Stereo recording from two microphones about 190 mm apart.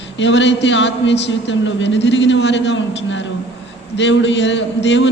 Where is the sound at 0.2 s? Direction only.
70° left (ahead or behind).